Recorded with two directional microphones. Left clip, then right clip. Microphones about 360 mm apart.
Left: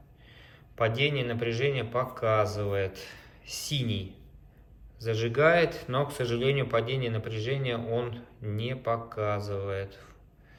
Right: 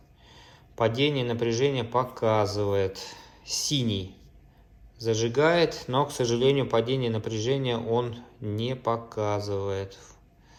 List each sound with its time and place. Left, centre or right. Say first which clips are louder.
0.3 s a man's voice: right 2 dB; centre